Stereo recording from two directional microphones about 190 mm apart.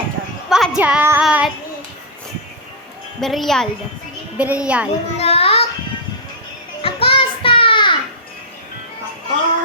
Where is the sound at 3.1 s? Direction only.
Centre (ahead or behind).